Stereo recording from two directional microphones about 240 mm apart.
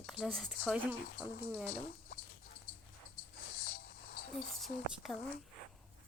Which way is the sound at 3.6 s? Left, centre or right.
Left.